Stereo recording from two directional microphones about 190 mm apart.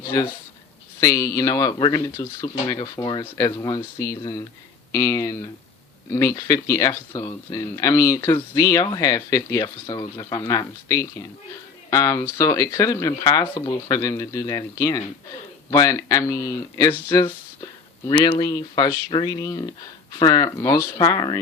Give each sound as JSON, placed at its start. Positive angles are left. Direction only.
{"t": 0.9, "sound": "speech", "side_deg": 15}
{"t": 18.3, "sound": "speech", "side_deg": 20}